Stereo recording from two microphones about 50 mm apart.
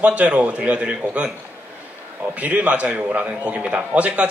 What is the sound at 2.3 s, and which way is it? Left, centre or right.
A man's voice, right.